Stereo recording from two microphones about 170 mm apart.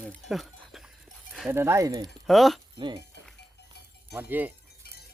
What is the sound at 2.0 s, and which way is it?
Speech, centre (ahead or behind).